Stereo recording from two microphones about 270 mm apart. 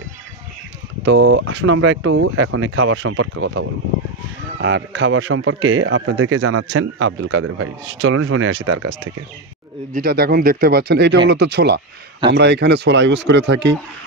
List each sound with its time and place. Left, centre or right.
1.0 s a man's voice: right
9.9 s speech: right